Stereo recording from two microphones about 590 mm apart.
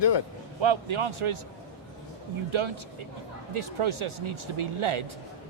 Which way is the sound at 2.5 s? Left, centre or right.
Right.